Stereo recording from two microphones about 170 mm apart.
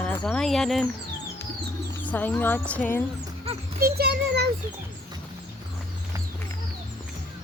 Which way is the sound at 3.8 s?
70° right (ahead or behind).